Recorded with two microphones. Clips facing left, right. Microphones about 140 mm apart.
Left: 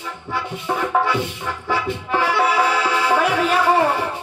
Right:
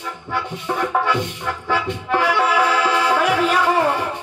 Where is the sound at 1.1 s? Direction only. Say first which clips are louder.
Right 1 dB; 10° left (ahead or behind).